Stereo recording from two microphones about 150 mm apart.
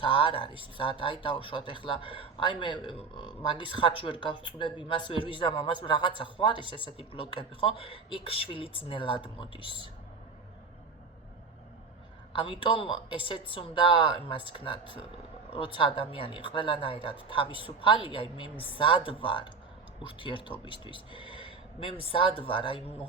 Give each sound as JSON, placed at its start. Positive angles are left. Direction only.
{"t": 0.0, "sound": "speech", "side_deg": 35}
{"t": 12.3, "sound": "speech", "side_deg": 35}